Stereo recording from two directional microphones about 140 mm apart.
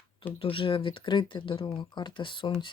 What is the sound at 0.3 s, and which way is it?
Speech, 40° left (ahead or behind).